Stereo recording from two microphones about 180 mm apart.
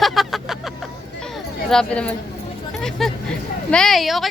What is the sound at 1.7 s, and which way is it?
A woman's voice, 5° left (ahead or behind).